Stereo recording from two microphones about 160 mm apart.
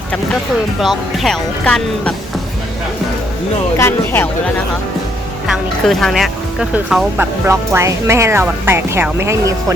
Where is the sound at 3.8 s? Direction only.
15° left (ahead or behind).